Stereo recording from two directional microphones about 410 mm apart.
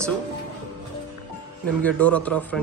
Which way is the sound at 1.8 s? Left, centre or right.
Centre.